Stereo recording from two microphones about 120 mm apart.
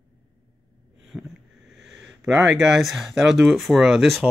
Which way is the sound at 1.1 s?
Centre (ahead or behind).